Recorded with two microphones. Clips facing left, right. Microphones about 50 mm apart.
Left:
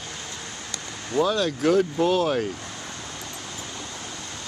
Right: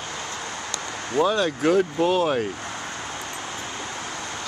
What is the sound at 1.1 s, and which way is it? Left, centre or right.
Speech, centre.